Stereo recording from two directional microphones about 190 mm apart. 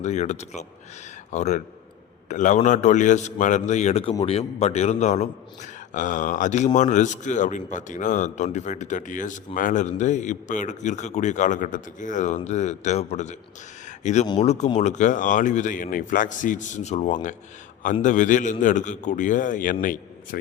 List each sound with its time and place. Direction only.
0.0 s a man's voice: 35° left (ahead or behind)